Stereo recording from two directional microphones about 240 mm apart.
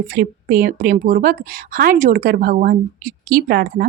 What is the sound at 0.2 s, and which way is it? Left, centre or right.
A woman's voice, right.